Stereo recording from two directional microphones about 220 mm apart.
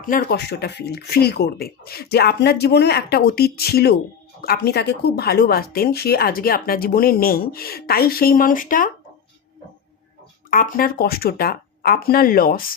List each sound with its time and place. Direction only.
0.1 s speech: 40° left (ahead or behind)
10.5 s speech: 40° left (ahead or behind)